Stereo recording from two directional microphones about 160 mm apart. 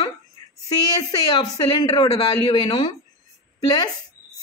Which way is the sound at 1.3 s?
30° left (ahead or behind).